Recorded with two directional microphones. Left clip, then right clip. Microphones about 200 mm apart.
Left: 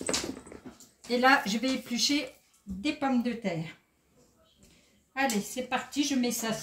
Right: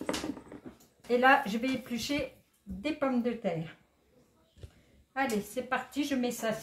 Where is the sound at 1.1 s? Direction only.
25° right (ahead or behind).